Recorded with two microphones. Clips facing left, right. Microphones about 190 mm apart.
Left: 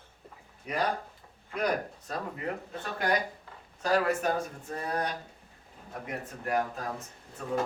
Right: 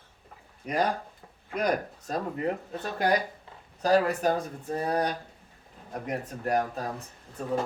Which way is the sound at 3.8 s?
35° right (ahead or behind).